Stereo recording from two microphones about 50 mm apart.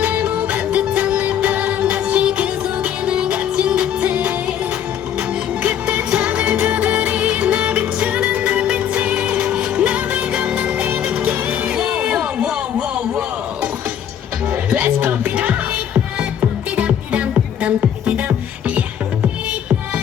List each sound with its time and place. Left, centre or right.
0.2 s music: right
6.1 s music: right
11.7 s a sound: centre
14.7 s music: right
16.4 s music: right